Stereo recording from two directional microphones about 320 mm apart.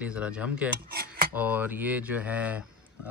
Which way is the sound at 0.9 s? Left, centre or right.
Right.